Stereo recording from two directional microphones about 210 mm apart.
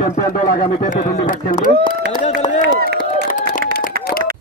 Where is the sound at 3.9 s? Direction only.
45° right (ahead or behind).